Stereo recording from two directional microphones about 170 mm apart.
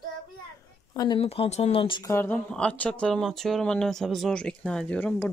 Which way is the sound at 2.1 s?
10° left (ahead or behind).